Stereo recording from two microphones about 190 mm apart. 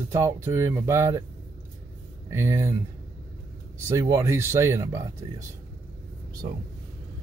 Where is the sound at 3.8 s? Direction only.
15° right (ahead or behind).